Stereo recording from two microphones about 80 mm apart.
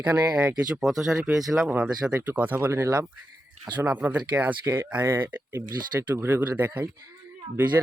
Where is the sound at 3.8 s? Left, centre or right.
Centre.